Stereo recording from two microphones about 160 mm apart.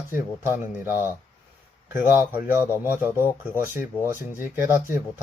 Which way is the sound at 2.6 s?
15° left (ahead or behind).